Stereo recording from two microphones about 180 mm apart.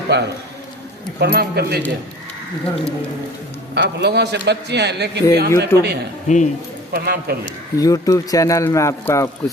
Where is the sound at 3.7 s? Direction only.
65° right (ahead or behind).